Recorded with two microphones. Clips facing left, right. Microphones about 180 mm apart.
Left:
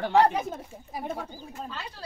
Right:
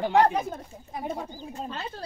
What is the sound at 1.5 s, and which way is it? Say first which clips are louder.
Speech: right 5 dB; 25° right (ahead or behind).